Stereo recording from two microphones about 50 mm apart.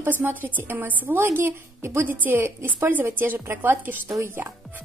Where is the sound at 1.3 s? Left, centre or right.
Right.